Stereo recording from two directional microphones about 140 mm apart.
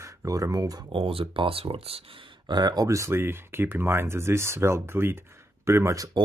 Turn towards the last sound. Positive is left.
turn(degrees=-20)  # may be behind; listen again after turning